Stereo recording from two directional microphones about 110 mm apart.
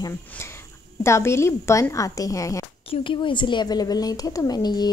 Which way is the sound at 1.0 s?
25° left (ahead or behind).